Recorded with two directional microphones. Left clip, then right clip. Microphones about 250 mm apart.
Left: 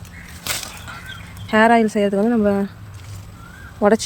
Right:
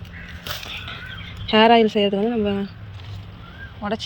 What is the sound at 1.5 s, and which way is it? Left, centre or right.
Speech, centre.